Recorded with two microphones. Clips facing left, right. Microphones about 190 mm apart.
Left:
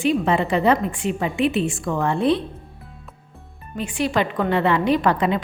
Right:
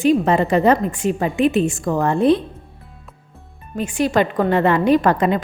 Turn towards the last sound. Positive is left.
turn(degrees=-45)  # may be behind; listen again after turning